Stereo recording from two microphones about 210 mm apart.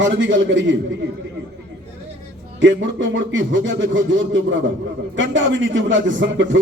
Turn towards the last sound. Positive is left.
turn(degrees=-60)  # may be behind; listen again after turning